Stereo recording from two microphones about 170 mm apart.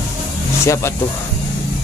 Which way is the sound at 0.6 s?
15° left (ahead or behind).